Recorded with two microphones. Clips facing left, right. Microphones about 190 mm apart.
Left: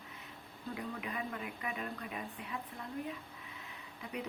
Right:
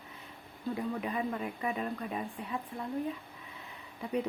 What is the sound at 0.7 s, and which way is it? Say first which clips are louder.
Speech: right 7 dB; 30° right (ahead or behind).